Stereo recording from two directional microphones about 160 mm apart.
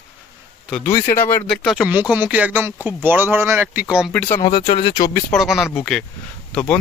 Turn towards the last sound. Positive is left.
turn(degrees=5)  # may be behind; listen again after turning